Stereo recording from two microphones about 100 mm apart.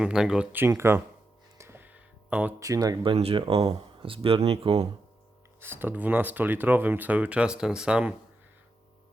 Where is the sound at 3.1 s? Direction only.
65° right (ahead or behind); by 4.9 s 90° right.